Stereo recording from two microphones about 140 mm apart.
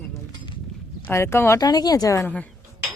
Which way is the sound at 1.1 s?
20° left (ahead or behind).